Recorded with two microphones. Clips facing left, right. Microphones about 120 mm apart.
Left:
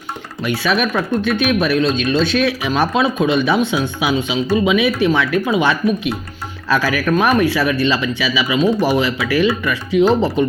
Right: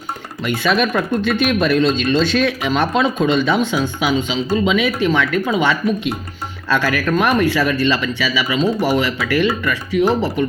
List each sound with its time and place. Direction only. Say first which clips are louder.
0.4 s speech: right 1 dB; 5° left (ahead or behind)